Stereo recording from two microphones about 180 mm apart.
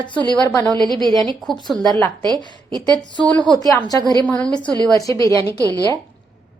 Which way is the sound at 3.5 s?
20° left (ahead or behind).